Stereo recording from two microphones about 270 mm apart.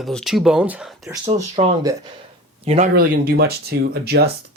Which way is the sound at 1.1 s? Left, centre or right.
Right.